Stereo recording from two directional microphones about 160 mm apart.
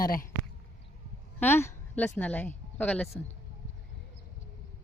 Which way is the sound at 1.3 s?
15° left (ahead or behind).